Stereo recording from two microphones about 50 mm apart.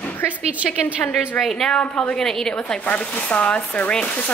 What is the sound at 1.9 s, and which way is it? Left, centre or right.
Speech, left.